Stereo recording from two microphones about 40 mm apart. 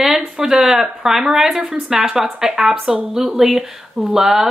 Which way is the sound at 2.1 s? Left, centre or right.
Centre.